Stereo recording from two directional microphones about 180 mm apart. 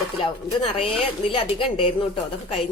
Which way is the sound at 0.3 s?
30° left (ahead or behind).